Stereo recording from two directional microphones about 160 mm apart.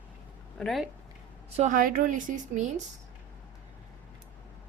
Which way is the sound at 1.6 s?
55° right (ahead or behind).